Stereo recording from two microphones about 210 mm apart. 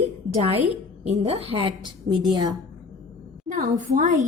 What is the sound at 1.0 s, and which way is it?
A woman's voice, 30° right (ahead or behind).